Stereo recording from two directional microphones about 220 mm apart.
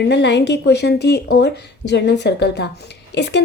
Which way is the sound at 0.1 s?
50° left (ahead or behind).